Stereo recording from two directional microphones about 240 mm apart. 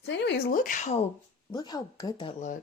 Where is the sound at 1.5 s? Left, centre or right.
Centre.